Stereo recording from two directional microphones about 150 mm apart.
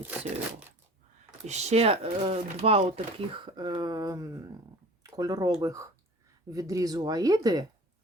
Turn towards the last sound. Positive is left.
turn(degrees=-25)  # may be behind; listen again after turning